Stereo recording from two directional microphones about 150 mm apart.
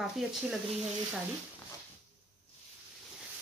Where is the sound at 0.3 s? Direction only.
5° right (ahead or behind).